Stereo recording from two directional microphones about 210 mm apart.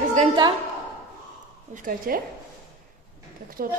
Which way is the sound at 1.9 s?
40° right (ahead or behind).